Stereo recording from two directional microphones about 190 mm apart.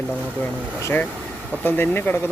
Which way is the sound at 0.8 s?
15° left (ahead or behind).